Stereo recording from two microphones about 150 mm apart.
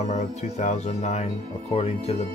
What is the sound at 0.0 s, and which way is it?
Speech, 45° left (ahead or behind).